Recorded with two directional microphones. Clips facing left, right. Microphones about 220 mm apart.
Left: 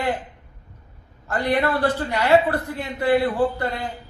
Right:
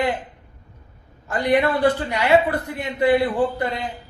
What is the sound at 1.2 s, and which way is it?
A woman's voice, 15° right (ahead or behind).